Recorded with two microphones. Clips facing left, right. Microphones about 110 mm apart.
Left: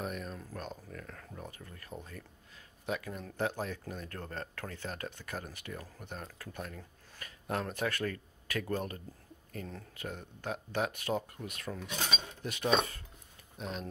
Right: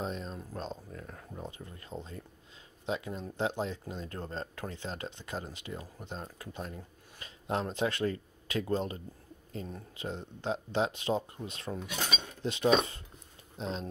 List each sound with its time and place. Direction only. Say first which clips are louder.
0.0 s speech: right 2 dB; 25° right (ahead or behind)